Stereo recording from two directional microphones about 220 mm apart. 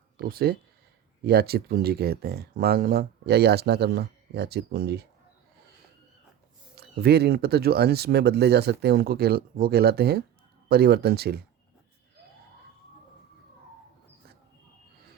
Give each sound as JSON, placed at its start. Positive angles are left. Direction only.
{"t": 0.3, "sound": "speech", "side_deg": -45}
{"t": 6.7, "sound": "speech", "side_deg": -45}